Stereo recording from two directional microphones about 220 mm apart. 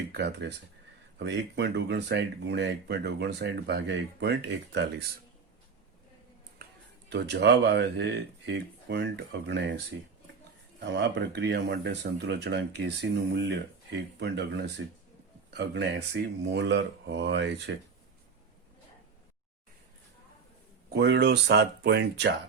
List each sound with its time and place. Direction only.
0.1 s speech: 50° right (ahead or behind)
7.1 s speech: 50° right (ahead or behind)
20.9 s speech: 50° right (ahead or behind)